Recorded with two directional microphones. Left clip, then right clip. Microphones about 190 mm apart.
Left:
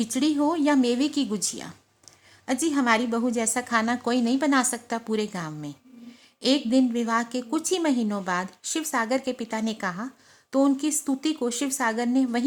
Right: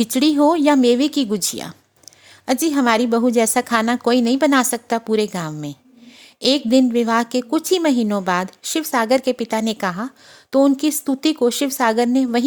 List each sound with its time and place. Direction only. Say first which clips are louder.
0.0 s a woman's voice: right 9 dB; 40° right (ahead or behind)